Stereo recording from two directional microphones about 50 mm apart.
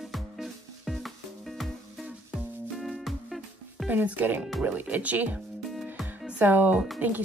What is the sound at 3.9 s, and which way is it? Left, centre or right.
Speech, right.